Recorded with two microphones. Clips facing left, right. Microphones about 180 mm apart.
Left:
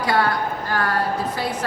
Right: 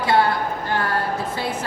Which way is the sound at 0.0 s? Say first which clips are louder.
Right 2 dB; 25° right (ahead or behind).